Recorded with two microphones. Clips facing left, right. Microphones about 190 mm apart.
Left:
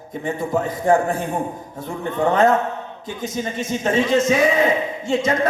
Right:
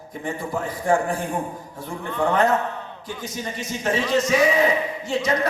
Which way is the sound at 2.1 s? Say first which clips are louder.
Left 3 dB; 20° left (ahead or behind).